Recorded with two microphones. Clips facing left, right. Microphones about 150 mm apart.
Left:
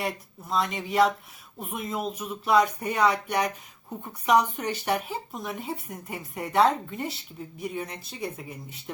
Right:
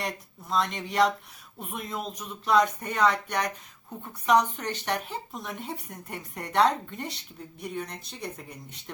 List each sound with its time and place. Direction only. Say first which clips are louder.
0.0 s speech: left 3 dB; 5° left (ahead or behind)